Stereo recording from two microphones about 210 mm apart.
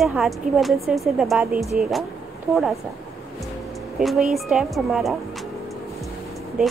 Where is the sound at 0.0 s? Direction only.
Centre (ahead or behind).